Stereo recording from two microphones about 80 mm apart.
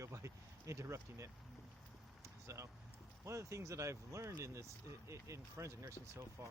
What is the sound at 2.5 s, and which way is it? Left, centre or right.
Speech, right.